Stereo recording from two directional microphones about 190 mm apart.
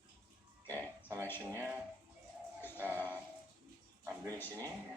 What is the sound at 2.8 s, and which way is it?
Speech, 10° right (ahead or behind).